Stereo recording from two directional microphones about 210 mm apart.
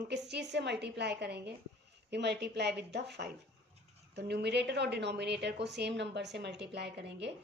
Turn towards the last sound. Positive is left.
turn(degrees=-55)  # may be behind; listen again after turning